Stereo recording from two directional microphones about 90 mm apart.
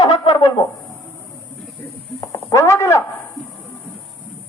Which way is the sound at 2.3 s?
35° left (ahead or behind).